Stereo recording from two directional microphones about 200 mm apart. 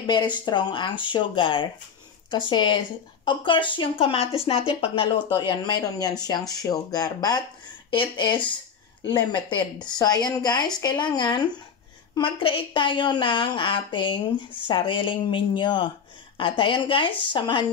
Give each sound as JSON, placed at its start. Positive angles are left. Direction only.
{"t": 0.0, "sound": "a woman's voice", "side_deg": 20}